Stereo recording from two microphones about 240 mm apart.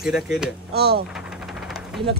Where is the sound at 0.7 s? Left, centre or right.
Right.